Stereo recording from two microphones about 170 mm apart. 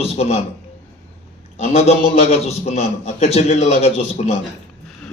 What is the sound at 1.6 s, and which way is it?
A man's voice, 40° left (ahead or behind).